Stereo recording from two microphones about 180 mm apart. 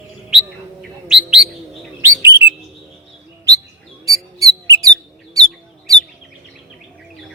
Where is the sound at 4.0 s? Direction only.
20° right (ahead or behind).